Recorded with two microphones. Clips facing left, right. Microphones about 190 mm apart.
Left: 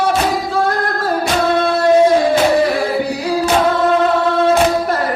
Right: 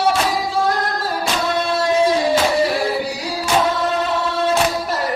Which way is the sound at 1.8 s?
55° left (ahead or behind).